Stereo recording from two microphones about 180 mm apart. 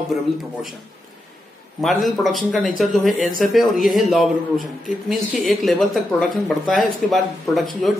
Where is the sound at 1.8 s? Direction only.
Centre (ahead or behind).